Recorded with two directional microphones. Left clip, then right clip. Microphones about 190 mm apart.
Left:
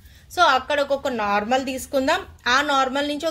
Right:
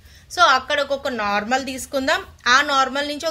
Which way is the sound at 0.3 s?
10° left (ahead or behind).